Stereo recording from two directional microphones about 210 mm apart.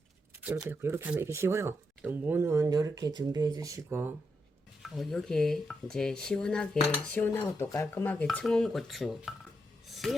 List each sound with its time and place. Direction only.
0.4 s speech: 10° right (ahead or behind)
4.8 s speech: centre (ahead or behind)
9.8 s a sound: centre (ahead or behind)